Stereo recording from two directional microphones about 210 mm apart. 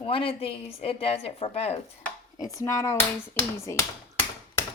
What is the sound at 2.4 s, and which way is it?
Speech, 15° left (ahead or behind).